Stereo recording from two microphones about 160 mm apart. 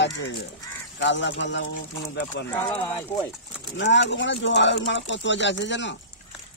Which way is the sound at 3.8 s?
90° left.